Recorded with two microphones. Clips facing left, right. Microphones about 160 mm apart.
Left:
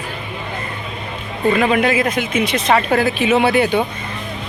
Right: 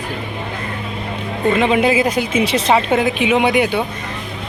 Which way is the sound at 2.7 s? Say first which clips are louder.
Left 1 dB; 20° right (ahead or behind).